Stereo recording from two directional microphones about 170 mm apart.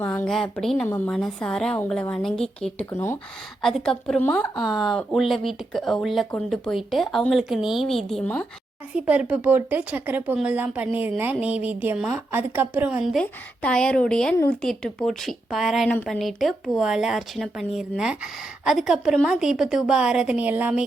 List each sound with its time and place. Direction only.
0.0 s a woman's voice: 5° left (ahead or behind)
0.9 s speech: 15° left (ahead or behind)
1.1 s a woman's voice: 5° left (ahead or behind)
2.9 s speech: 15° left (ahead or behind)
3.6 s a woman's voice: centre (ahead or behind)
9.0 s a woman's voice: 10° right (ahead or behind)